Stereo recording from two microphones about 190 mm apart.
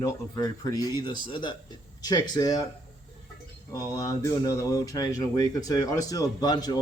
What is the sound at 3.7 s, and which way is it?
Speech, 15° left (ahead or behind).